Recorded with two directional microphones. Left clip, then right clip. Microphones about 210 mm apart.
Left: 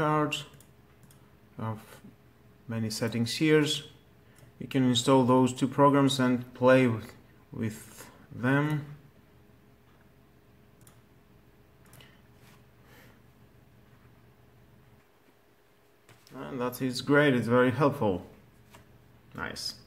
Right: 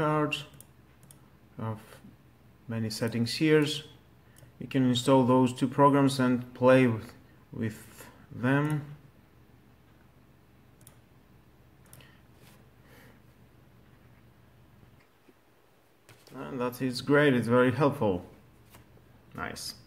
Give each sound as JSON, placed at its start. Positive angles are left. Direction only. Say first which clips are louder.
{"t": 0.0, "sound": "a sound", "louder": "left 1 dB", "side_deg": 0}
{"t": 1.6, "sound": "speech", "louder": "left 1 dB", "side_deg": 0}
{"t": 16.3, "sound": "speech", "louder": "even", "side_deg": -5}
{"t": 19.3, "sound": "speech", "louder": "left 1 dB", "side_deg": -5}